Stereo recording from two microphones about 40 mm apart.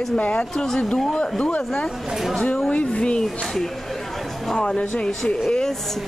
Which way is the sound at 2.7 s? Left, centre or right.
Left.